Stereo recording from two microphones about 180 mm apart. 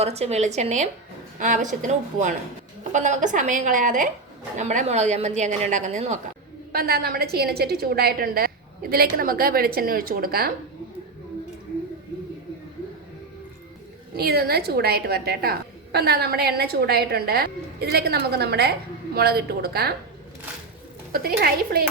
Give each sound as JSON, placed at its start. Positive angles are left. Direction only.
{"t": 0.0, "sound": "a woman's voice", "side_deg": -35}
{"t": 6.7, "sound": "a woman's voice", "side_deg": -60}
{"t": 14.2, "sound": "a woman's voice", "side_deg": -60}
{"t": 21.1, "sound": "a woman's voice", "side_deg": -60}